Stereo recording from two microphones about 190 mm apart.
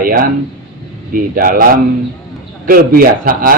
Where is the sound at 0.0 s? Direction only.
50° right (ahead or behind).